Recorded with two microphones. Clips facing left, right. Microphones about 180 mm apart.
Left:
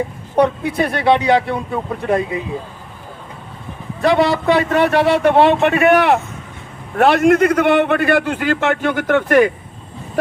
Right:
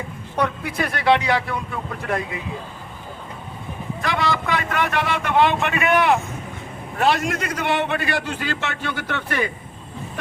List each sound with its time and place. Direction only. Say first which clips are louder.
0.3 s speech: left 8 dB; 30° left (ahead or behind)
4.0 s a man's voice: left 10 dB; 30° left (ahead or behind)
5.5 s speech: left 9 dB; 45° left (ahead or behind)
5.9 s a man's voice: left 5 dB; 65° left (ahead or behind)